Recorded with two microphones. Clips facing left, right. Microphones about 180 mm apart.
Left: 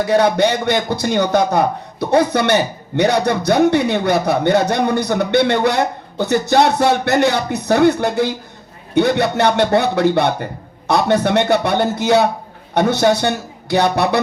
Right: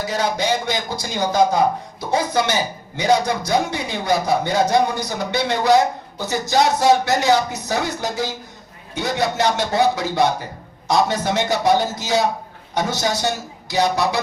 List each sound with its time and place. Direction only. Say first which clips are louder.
0.0 s a man's voice: left 8 dB; 60° left (ahead or behind)